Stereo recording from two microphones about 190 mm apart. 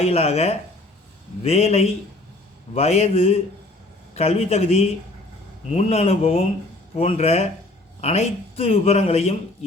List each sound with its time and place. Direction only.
0.0 s speech: 35° left (ahead or behind)